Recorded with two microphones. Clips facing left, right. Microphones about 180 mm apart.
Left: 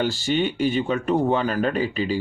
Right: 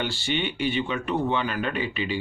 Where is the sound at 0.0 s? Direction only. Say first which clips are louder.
Left 5 dB; 40° left (ahead or behind).